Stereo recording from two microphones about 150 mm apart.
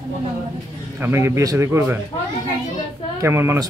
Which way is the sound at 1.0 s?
15° right (ahead or behind).